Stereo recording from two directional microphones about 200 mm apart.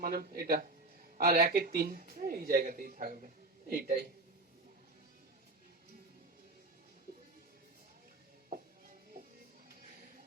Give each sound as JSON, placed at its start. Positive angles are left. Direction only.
{"t": 0.0, "sound": "speech", "side_deg": -45}